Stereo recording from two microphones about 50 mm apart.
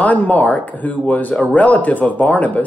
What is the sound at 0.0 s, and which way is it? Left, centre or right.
Speech, left.